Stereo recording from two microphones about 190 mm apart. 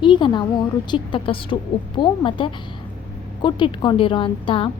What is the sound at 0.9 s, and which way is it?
A woman's voice, 25° left (ahead or behind).